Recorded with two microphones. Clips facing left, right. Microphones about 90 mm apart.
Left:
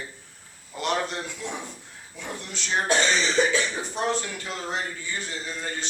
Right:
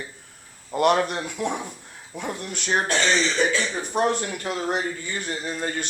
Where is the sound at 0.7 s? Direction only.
60° right (ahead or behind).